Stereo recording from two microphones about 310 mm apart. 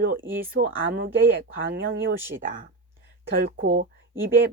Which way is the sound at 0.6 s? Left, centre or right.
Right.